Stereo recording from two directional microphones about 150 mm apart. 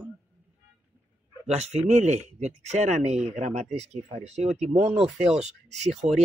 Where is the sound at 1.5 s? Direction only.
45° right (ahead or behind).